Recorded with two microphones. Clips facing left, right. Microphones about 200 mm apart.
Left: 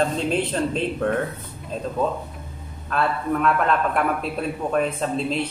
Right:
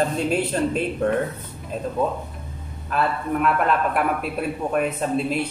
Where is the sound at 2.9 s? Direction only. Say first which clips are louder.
Even; 5° right (ahead or behind).